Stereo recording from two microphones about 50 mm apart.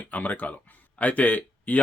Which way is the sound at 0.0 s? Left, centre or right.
Left.